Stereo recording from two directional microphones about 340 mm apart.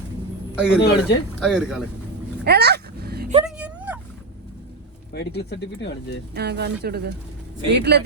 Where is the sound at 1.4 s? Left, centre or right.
Centre.